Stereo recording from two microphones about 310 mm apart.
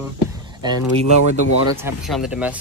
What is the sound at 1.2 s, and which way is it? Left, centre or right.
Speech, left.